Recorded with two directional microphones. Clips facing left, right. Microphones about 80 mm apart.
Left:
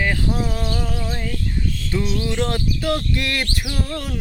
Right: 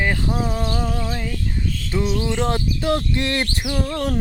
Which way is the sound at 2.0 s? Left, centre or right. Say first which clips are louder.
Right 2 dB; right.